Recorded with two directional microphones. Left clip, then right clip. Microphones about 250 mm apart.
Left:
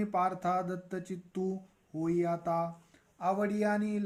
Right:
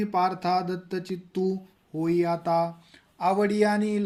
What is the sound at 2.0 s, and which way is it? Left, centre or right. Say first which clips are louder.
Speech: right 7 dB; right.